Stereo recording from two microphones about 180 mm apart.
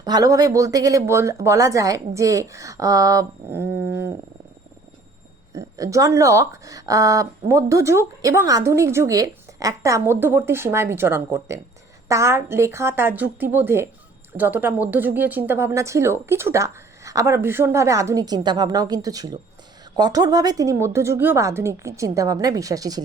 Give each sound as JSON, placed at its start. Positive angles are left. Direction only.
{"t": 0.0, "sound": "speech", "side_deg": -20}
{"t": 5.5, "sound": "speech", "side_deg": -20}